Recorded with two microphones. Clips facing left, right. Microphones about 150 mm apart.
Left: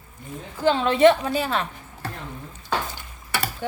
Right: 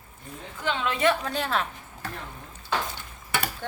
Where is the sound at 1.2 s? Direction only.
5° left (ahead or behind).